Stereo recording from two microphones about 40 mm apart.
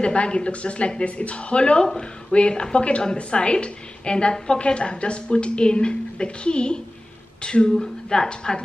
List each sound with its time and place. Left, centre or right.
0.0 s a woman's voice: left
1.8 s a woman's voice: centre